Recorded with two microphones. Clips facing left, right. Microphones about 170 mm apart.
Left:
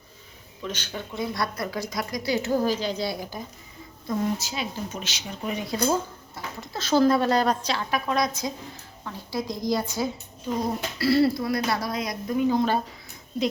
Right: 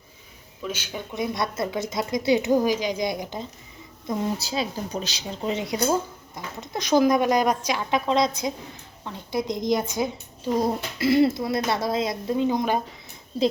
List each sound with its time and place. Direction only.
0.6 s a woman's voice: 10° right (ahead or behind)
4.4 s a woman's voice: 35° right (ahead or behind); by 12.8 s 15° right (ahead or behind)